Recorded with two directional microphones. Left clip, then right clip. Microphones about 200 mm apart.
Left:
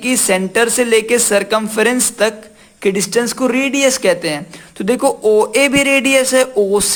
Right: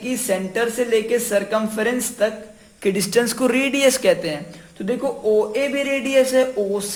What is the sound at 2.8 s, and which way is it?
Speech, 20° left (ahead or behind).